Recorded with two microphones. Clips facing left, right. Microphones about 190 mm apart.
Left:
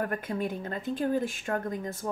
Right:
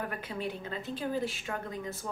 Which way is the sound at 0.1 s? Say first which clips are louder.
Left 5 dB; 45° left (ahead or behind).